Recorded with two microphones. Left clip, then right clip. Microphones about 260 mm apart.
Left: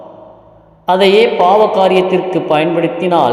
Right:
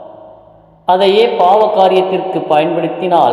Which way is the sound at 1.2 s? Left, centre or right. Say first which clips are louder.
Even; left.